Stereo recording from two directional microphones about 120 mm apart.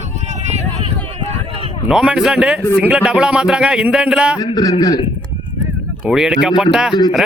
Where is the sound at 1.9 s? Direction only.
5° right (ahead or behind).